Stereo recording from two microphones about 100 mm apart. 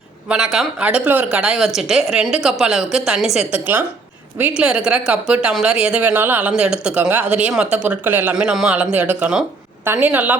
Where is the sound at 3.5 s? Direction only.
15° right (ahead or behind).